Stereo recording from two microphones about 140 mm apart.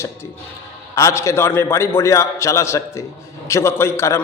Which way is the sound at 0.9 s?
20° left (ahead or behind).